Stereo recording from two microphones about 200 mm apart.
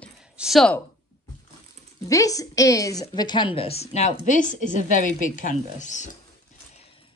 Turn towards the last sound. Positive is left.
turn(degrees=40)  # may be behind; listen again after turning